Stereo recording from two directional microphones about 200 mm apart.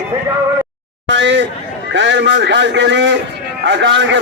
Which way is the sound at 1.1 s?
65° right (ahead or behind).